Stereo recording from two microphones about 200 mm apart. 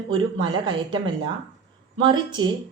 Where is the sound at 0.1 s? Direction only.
25° right (ahead or behind).